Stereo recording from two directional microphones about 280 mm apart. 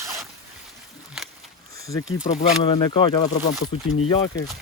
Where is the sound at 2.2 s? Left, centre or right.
Left.